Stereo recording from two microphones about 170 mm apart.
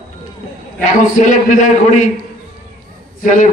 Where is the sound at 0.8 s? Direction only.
50° left (ahead or behind).